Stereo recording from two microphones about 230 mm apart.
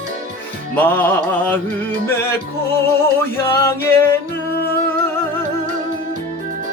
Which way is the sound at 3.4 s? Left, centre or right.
Centre.